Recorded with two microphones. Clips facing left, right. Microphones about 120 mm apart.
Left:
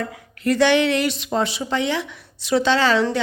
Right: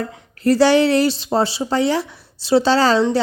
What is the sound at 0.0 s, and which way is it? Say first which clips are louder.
A woman's voice: right 4 dB; 35° right (ahead or behind).